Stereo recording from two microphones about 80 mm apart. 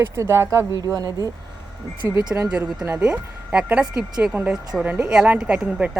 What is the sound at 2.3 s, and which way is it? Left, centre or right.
Speech, right.